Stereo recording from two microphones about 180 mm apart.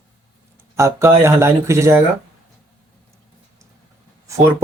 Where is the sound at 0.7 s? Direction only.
15° right (ahead or behind).